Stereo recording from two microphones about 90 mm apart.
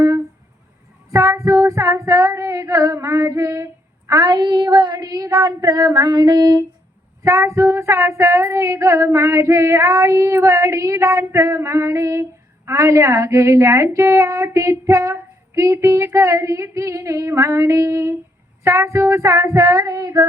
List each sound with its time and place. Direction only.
1.1 s female singing: 35° right (ahead or behind)